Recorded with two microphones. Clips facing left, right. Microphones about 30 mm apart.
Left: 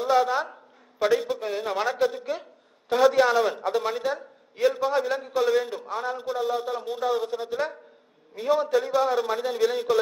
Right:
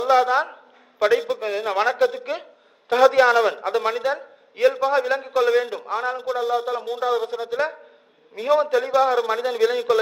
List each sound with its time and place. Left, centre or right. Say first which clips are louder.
0.0 s a man's voice: right 4 dB; right
5.8 s a man's voice: right 5 dB; right
7.2 s a man's voice: right 2 dB; right
7.5 s a man's voice: right 7 dB; right
8.4 s a man's voice: right 4 dB; right
8.9 s a man's voice: right 4 dB; right